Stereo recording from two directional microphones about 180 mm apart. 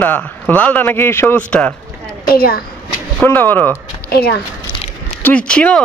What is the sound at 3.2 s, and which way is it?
Speech, 10° left (ahead or behind).